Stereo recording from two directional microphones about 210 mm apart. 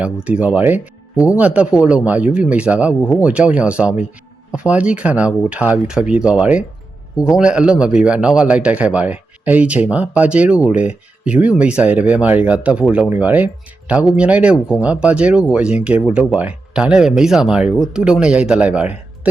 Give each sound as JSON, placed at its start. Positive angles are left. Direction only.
{"t": 0.0, "sound": "speech", "side_deg": -5}